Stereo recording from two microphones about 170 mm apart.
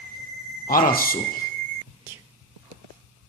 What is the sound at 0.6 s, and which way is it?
Speech, 55° left (ahead or behind).